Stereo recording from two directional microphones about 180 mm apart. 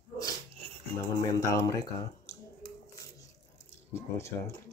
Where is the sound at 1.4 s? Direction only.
20° left (ahead or behind).